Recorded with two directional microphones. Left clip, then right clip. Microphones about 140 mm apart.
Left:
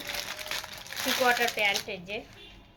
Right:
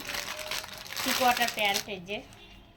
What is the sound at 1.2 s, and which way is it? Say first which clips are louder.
Speech: left 1 dB; 20° left (ahead or behind).